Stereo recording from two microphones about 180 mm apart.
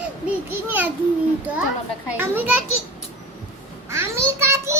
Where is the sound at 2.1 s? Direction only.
10° right (ahead or behind).